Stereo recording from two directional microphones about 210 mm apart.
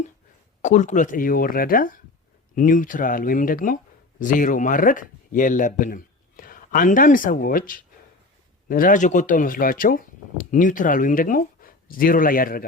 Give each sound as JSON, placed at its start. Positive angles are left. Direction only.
{"t": 0.6, "sound": "speech", "side_deg": 35}